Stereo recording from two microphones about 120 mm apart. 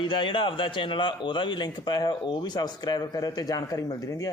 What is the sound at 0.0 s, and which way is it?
Speech, 40° left (ahead or behind).